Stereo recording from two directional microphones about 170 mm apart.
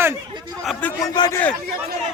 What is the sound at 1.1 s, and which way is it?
Speech, 25° left (ahead or behind).